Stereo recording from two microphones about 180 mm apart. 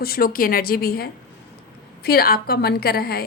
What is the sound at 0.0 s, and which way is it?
Speech, 55° left (ahead or behind).